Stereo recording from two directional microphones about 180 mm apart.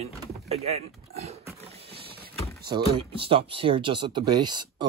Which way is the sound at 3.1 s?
30° right (ahead or behind).